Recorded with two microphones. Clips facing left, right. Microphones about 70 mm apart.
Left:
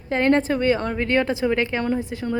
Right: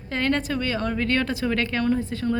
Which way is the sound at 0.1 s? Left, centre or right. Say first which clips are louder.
Left 5 dB; left.